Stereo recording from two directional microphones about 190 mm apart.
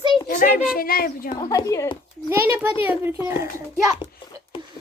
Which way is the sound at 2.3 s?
10° right (ahead or behind).